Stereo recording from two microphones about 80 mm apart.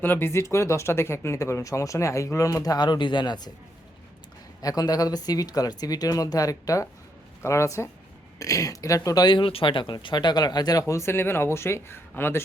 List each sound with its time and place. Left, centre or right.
0.0 s speech: left
4.6 s speech: left
9.3 s speech: left